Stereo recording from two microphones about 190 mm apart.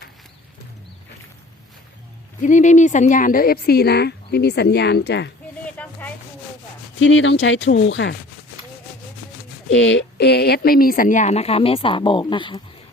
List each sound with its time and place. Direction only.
2.4 s speech: 40° left (ahead or behind); by 5.3 s 60° left (ahead or behind)
5.7 s rub: 10° left (ahead or behind)
7.0 s speech: 75° left (ahead or behind)
9.6 s speech: 75° left (ahead or behind); by 12.6 s 25° left (ahead or behind)